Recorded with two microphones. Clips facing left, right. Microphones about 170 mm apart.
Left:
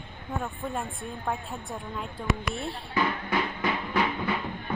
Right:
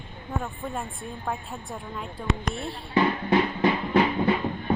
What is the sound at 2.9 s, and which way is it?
Drum, 30° right (ahead or behind).